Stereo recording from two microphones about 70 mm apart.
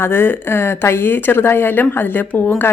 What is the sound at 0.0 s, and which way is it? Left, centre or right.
Speech, left.